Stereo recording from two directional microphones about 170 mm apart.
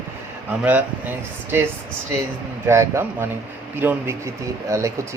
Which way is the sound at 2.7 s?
15° right (ahead or behind).